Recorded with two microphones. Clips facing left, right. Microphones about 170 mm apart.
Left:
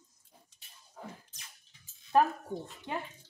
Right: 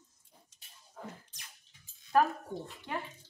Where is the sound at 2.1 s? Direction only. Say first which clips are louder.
Left 1 dB; 20° left (ahead or behind).